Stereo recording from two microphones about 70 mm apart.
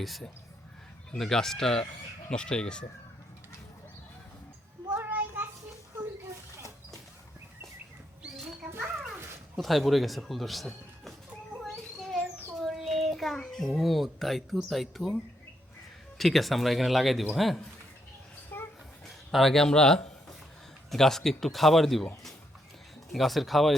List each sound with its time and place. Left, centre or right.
0.0 s speech: centre
4.9 s child singing: right
9.6 s speech: centre
12.5 s a child's voice: centre
18.5 s a sound: left
19.0 s speech: centre
23.1 s speech: centre